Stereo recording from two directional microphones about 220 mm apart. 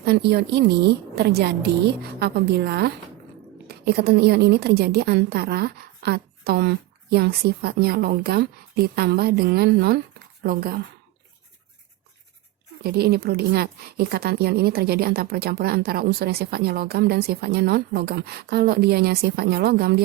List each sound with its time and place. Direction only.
0.0 s speech: 45° right (ahead or behind)
12.8 s speech: 45° right (ahead or behind)